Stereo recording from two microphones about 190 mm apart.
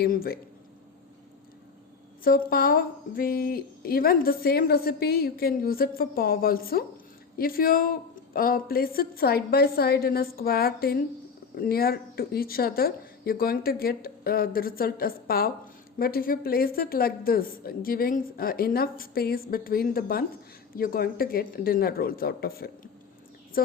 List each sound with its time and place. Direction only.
0.0 s a woman's voice: 50° left (ahead or behind)
2.5 s a woman's voice: 50° left (ahead or behind)